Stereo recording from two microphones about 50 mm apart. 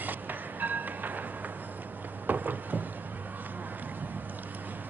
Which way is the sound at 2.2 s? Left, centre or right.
Right.